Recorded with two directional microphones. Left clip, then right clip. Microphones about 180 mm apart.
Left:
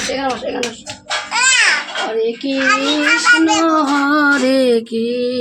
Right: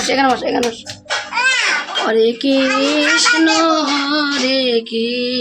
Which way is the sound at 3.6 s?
25° left (ahead or behind).